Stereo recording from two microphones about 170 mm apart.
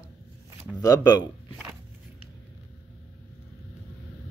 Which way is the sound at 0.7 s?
20° left (ahead or behind).